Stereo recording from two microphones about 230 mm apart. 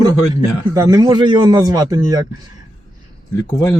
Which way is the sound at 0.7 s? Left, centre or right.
Centre.